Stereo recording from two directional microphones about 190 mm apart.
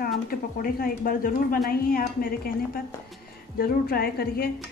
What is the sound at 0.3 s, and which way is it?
Speech, 50° left (ahead or behind).